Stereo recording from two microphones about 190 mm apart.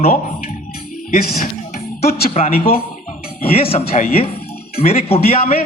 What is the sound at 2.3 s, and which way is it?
A man's voice, 30° left (ahead or behind).